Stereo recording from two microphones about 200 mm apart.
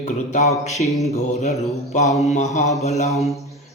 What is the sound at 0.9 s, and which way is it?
Mantra, centre (ahead or behind).